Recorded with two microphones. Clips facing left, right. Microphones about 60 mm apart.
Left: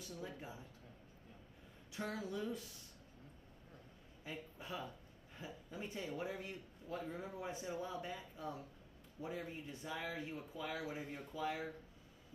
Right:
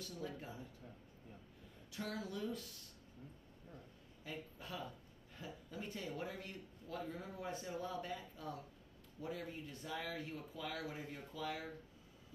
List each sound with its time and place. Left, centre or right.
0.0 s speech: centre
1.9 s speech: centre
4.2 s a man's voice: centre